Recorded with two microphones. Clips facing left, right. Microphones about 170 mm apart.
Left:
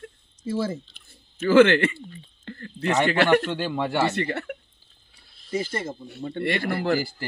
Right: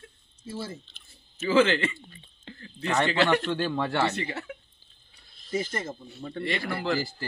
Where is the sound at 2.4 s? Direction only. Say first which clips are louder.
Left 7 dB; 55° left (ahead or behind).